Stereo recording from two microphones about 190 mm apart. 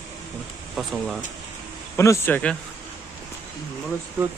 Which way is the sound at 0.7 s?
Centre (ahead or behind).